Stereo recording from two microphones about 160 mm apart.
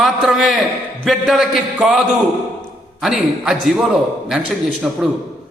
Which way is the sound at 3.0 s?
Centre (ahead or behind).